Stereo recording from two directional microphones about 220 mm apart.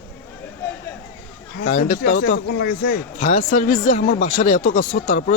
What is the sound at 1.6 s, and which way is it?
Speech, 35° left (ahead or behind).